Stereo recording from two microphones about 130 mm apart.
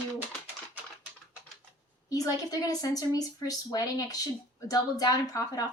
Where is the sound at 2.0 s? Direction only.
30° left (ahead or behind).